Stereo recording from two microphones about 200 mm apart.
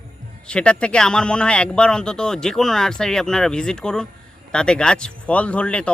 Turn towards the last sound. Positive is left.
turn(degrees=5)  # may be behind; listen again after turning